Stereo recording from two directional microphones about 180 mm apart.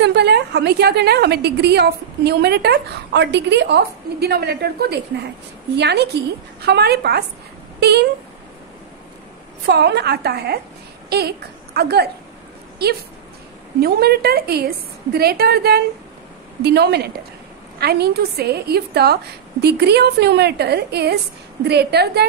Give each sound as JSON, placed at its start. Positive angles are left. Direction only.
{"t": 0.0, "sound": "a woman's voice", "side_deg": -70}
{"t": 9.7, "sound": "a woman's voice", "side_deg": -65}